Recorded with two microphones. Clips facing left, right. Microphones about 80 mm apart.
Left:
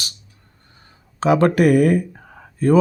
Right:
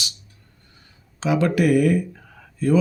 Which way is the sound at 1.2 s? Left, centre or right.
Left.